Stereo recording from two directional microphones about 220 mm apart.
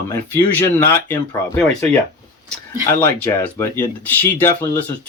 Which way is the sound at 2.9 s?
10° left (ahead or behind).